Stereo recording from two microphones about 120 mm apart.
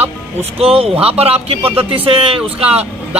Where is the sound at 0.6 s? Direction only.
55° right (ahead or behind).